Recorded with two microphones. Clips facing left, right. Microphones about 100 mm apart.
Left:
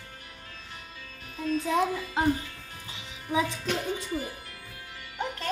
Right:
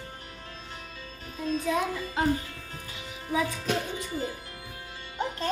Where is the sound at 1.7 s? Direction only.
25° left (ahead or behind).